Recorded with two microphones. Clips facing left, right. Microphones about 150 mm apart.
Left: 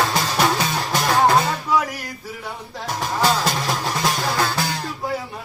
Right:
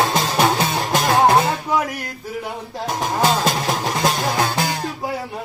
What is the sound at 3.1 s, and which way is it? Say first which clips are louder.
Music: right 1 dB; 20° right (ahead or behind).